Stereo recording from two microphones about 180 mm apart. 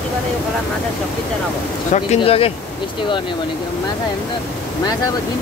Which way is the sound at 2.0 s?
35° left (ahead or behind).